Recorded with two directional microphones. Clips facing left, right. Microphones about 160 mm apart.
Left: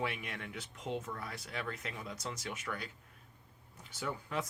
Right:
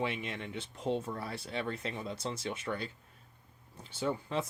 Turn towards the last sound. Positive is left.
turn(degrees=-25)  # may be behind; listen again after turning